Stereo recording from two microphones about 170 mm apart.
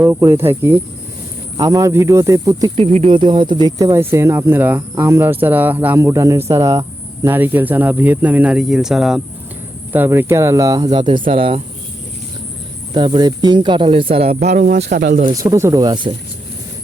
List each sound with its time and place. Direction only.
0.0 s speech: 15° right (ahead or behind)
2.7 s speech: 35° right (ahead or behind)
12.9 s speech: 25° right (ahead or behind)
14.8 s speech: 65° right (ahead or behind)
15.1 s speech: 50° right (ahead or behind)
15.4 s speech: 15° right (ahead or behind)